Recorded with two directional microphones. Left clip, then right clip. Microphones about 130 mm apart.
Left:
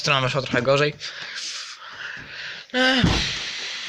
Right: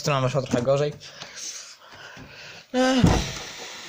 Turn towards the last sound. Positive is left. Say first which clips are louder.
# left 7 dB
turn(degrees=-25)  # may be behind; listen again after turning